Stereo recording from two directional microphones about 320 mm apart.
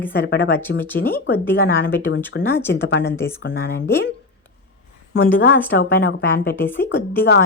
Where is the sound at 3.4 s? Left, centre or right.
Left.